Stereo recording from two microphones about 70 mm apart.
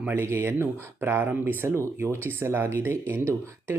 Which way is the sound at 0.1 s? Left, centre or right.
Right.